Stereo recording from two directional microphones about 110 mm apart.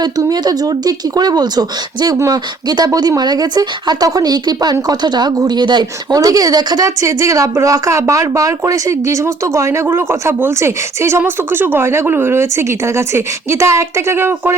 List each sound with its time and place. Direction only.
0.0 s speech: 40° right (ahead or behind); by 14.5 s 20° right (ahead or behind)